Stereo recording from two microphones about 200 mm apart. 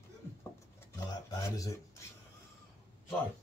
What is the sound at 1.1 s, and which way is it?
Speech, 20° left (ahead or behind).